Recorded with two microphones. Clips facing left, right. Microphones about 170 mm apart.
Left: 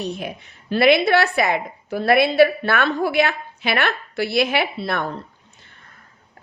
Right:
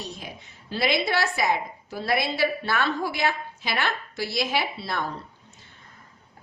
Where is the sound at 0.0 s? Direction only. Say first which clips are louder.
Left 10 dB; 60° left (ahead or behind).